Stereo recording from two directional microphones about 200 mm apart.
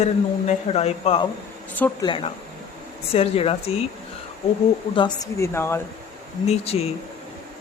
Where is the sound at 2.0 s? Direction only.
25° left (ahead or behind).